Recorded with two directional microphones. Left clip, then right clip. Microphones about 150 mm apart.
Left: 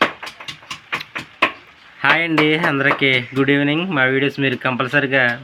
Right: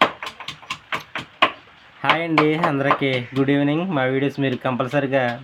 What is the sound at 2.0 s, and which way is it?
Speech, 5° right (ahead or behind).